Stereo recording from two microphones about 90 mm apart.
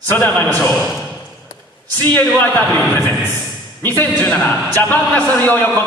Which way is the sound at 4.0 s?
20° left (ahead or behind).